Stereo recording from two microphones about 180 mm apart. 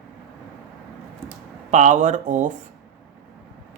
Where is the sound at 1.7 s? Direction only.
40° right (ahead or behind).